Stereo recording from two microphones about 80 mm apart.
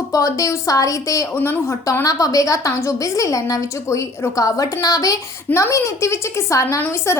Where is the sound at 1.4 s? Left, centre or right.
Left.